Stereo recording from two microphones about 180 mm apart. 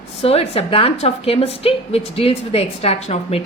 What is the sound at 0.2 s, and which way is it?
Speech, 35° left (ahead or behind).